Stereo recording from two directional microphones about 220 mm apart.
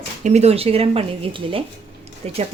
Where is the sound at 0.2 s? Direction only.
30° right (ahead or behind).